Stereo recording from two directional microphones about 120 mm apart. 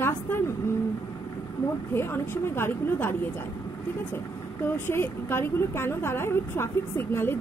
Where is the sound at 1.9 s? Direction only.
20° left (ahead or behind).